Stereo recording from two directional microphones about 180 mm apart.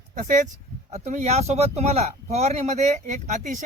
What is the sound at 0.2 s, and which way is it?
Speech, 45° right (ahead or behind).